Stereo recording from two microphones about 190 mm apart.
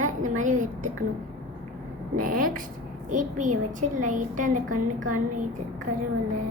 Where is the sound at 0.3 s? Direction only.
40° right (ahead or behind).